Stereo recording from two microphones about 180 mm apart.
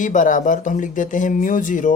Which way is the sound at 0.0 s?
45° left (ahead or behind).